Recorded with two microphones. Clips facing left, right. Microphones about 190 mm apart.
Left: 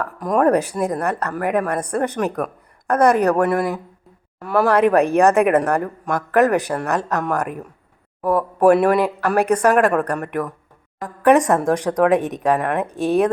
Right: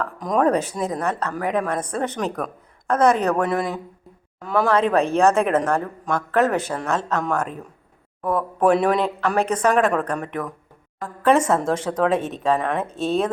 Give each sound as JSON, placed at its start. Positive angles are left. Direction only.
{"t": 0.0, "sound": "speech", "side_deg": 10}